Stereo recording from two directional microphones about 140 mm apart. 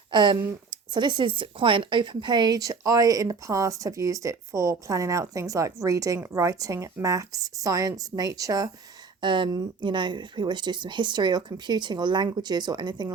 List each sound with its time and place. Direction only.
0.1 s speech: 35° right (ahead or behind)